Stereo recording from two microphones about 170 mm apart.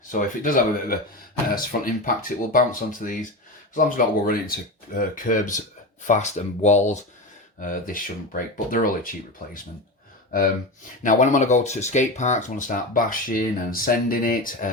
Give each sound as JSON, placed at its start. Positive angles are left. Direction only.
{"t": 0.1, "sound": "speech", "side_deg": 50}
{"t": 11.0, "sound": "speech", "side_deg": 50}